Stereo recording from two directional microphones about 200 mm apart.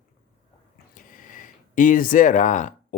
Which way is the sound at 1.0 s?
40° left (ahead or behind).